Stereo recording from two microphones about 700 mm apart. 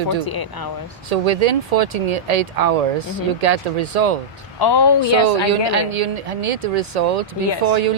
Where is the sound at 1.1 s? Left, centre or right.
Right.